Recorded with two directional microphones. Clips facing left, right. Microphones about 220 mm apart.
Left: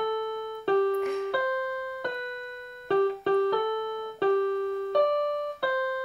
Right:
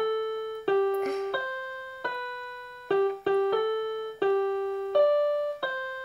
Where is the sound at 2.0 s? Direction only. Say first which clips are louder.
Left 3 dB; 50° left (ahead or behind).